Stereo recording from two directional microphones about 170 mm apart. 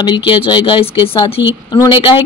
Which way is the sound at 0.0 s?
25° left (ahead or behind).